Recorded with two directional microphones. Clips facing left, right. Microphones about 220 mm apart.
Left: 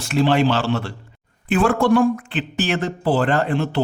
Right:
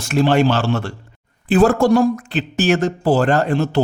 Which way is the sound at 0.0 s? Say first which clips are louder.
Right 2 dB; 45° right (ahead or behind).